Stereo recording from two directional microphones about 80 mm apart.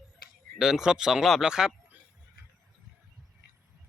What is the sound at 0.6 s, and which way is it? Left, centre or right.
Speech, centre.